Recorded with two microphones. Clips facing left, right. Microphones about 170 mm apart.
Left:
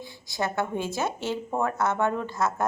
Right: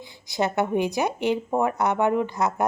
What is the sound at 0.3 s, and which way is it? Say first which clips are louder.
A woman's voice: right 5 dB; 20° right (ahead or behind).